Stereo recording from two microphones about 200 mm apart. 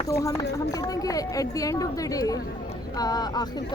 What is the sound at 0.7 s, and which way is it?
A woman's voice, 20° left (ahead or behind).